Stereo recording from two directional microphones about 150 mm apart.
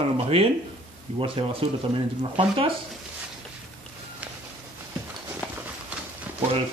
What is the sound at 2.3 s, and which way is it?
Speech, 35° right (ahead or behind).